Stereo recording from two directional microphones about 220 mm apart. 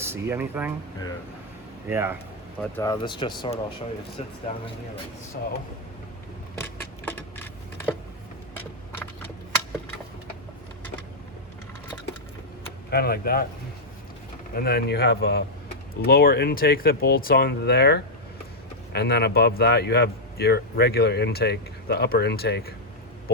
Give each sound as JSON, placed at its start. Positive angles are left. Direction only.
{"t": 0.0, "sound": "speech", "side_deg": -10}
{"t": 1.9, "sound": "speech", "side_deg": -10}
{"t": 2.7, "sound": "speech", "side_deg": 15}
{"t": 6.6, "sound": "a sound", "side_deg": 10}
{"t": 12.9, "sound": "a man's voice", "side_deg": 45}
{"t": 14.5, "sound": "a man's voice", "side_deg": 45}